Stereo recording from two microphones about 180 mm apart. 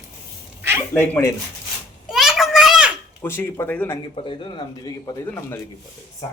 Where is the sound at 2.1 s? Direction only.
Centre (ahead or behind).